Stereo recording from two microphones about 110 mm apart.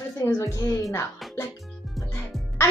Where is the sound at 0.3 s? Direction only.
25° left (ahead or behind).